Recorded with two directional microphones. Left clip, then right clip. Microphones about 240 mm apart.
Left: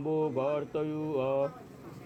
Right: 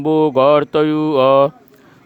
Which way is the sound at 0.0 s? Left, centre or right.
Right.